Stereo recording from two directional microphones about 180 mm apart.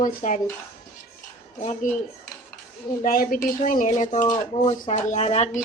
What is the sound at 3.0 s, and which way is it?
A woman's voice, 50° left (ahead or behind).